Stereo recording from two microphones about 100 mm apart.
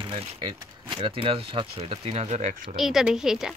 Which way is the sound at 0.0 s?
60° right (ahead or behind).